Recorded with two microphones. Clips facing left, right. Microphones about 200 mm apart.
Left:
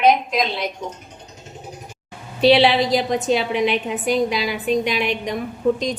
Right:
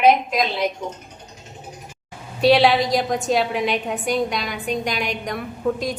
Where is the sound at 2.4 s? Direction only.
Centre (ahead or behind).